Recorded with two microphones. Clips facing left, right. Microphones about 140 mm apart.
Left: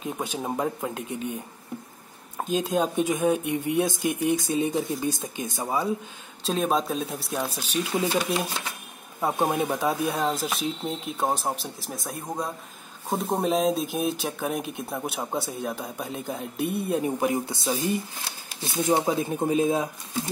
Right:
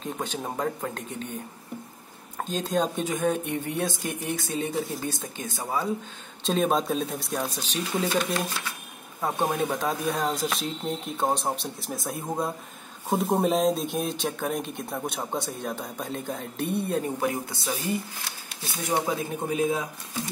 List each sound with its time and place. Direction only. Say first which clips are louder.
0.0 s speech: left 1 dB; 10° left (ahead or behind)
6.4 s speech: right 1 dB; centre (ahead or behind); by 19.9 s 25° left (ahead or behind)